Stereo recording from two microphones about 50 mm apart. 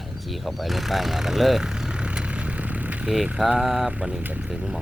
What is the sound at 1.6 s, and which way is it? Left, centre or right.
Vehicle, centre.